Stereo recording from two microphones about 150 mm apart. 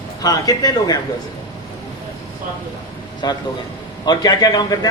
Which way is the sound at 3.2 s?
30° left (ahead or behind).